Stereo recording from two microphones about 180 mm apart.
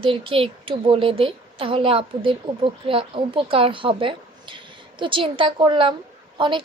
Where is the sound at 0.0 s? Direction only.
30° right (ahead or behind).